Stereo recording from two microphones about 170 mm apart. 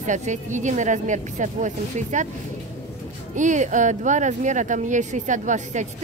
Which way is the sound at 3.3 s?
45° right (ahead or behind).